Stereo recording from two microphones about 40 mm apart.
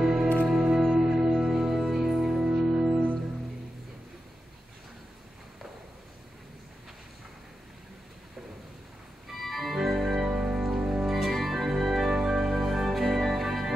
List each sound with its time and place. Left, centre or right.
0.0 s music: centre
9.4 s organ: centre
10.2 s music: right; by 13.7 s centre